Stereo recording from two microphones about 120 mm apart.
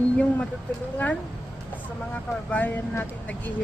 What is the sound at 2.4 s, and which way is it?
Speech, 15° left (ahead or behind).